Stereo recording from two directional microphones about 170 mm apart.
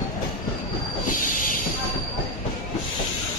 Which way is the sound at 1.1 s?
55° left (ahead or behind).